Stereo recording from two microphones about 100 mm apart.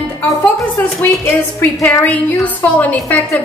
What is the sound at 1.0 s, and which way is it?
A woman's voice, 20° left (ahead or behind).